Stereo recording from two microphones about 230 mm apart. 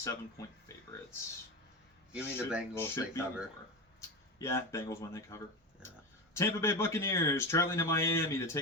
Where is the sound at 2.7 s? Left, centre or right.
Centre.